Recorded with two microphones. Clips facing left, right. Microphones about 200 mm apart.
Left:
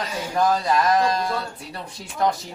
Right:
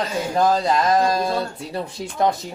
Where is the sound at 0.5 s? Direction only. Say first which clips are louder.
Right 2 dB; 25° right (ahead or behind).